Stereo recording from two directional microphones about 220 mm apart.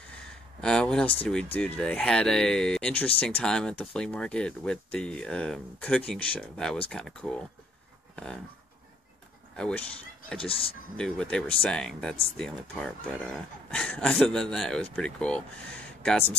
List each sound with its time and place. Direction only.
0.6 s a sound: 5° left (ahead or behind)
1.3 s speech: 5° left (ahead or behind)
9.6 s speech: 5° left (ahead or behind)
10.4 s speech: 25° left (ahead or behind)
11.0 s speech: 5° left (ahead or behind)